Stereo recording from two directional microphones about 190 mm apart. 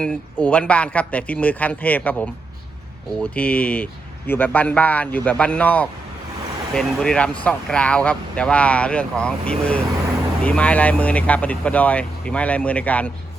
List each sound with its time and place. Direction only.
0.0 s speech: 5° left (ahead or behind)